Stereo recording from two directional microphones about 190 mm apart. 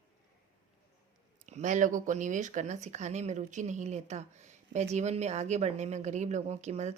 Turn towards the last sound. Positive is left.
turn(degrees=-35)  # may be behind; listen again after turning